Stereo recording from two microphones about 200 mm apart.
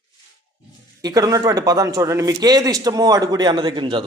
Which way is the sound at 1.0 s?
20° right (ahead or behind).